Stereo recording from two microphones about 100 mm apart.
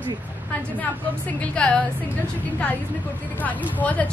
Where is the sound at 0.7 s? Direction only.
15° left (ahead or behind).